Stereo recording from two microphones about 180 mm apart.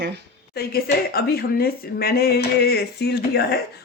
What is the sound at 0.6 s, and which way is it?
Speech, 60° left (ahead or behind).